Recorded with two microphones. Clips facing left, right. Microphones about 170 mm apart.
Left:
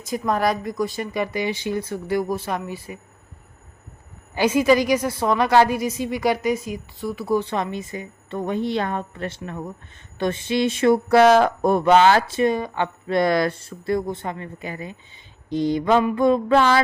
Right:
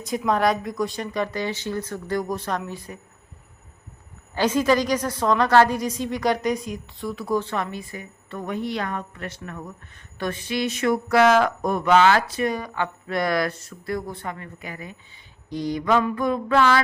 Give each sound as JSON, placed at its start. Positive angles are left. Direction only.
{"t": 0.0, "sound": "speech", "side_deg": 0}
{"t": 4.4, "sound": "a woman's voice", "side_deg": 10}